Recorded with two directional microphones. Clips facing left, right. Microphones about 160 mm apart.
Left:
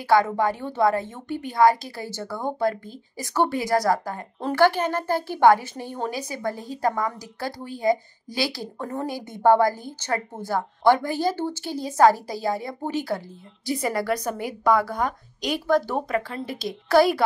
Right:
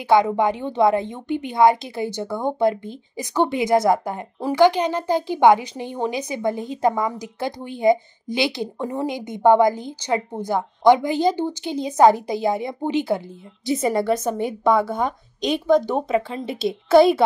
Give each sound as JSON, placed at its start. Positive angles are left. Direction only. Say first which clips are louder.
{"t": 0.1, "sound": "a woman's voice", "louder": "right 3 dB", "side_deg": -20}